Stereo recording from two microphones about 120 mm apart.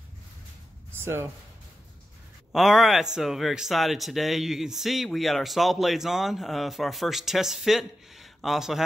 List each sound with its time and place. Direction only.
0.9 s speech: 20° right (ahead or behind)
2.5 s speech: centre (ahead or behind)